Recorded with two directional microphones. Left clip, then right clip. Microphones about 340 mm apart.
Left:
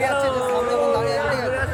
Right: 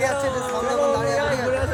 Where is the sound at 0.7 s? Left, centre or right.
Centre.